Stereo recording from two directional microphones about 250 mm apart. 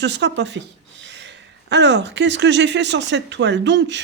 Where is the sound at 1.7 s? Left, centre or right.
Right.